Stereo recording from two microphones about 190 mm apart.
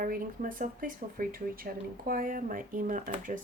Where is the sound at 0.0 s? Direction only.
45° right (ahead or behind).